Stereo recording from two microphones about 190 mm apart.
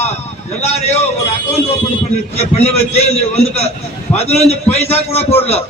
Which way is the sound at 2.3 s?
35° left (ahead or behind).